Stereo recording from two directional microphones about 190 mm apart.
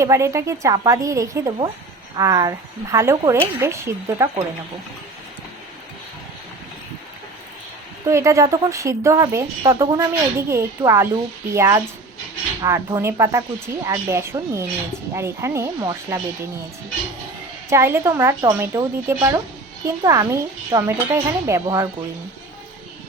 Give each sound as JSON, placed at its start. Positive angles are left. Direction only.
{"t": 0.0, "sound": "speech", "side_deg": -15}
{"t": 8.0, "sound": "speech", "side_deg": -15}
{"t": 17.7, "sound": "speech", "side_deg": -15}